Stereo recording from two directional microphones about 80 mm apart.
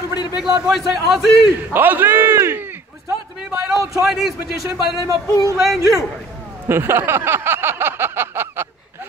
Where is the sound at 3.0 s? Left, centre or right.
Right.